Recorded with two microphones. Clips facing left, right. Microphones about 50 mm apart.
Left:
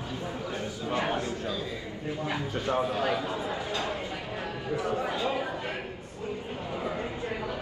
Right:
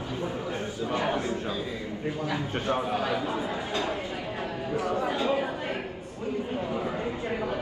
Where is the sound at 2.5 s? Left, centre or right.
Right.